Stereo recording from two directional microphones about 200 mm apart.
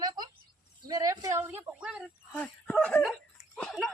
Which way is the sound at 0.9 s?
20° right (ahead or behind).